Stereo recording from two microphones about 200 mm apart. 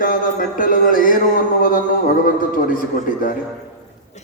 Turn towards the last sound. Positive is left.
turn(degrees=45)  # may be behind; listen again after turning